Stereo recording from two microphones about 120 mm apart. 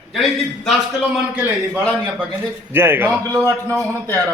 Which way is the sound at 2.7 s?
15° right (ahead or behind).